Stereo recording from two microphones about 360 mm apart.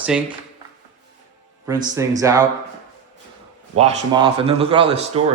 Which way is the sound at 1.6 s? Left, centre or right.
Centre.